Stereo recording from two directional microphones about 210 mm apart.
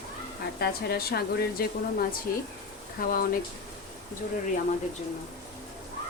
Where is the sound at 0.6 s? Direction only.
50° left (ahead or behind).